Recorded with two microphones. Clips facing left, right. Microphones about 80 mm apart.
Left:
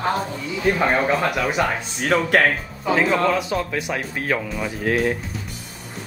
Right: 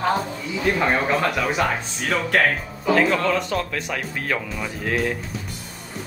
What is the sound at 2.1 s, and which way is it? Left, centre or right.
Speech, left.